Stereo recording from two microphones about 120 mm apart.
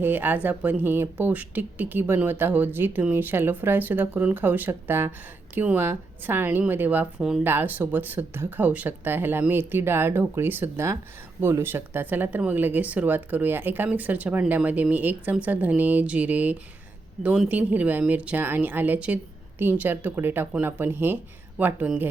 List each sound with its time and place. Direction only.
0.0 s speech: 15° right (ahead or behind)